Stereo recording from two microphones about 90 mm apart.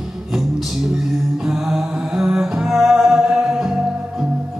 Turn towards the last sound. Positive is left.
turn(degrees=-5)  # may be behind; listen again after turning